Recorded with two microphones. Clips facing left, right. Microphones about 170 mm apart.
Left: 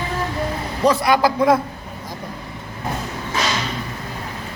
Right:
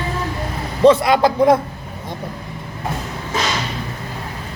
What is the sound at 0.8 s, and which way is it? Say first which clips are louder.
Speech: right 5 dB; 25° right (ahead or behind).